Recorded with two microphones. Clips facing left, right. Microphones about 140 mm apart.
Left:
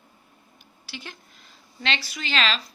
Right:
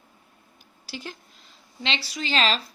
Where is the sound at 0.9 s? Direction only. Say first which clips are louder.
Right 4 dB; 35° right (ahead or behind).